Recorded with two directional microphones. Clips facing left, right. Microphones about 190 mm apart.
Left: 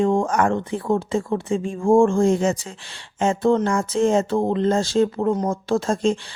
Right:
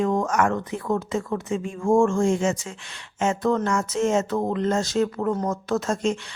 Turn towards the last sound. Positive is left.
turn(degrees=30)  # may be behind; listen again after turning